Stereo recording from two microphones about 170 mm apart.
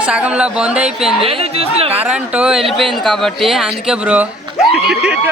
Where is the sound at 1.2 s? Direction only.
35° right (ahead or behind).